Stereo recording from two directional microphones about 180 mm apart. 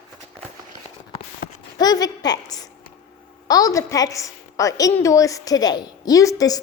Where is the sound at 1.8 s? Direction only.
20° left (ahead or behind).